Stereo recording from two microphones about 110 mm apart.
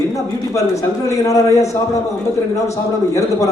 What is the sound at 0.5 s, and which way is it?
A man's voice, 30° left (ahead or behind).